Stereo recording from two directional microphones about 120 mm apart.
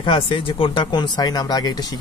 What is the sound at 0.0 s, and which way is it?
Speech, 45° left (ahead or behind).